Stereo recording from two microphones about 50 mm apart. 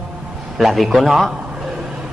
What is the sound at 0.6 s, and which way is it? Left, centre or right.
Speech, centre.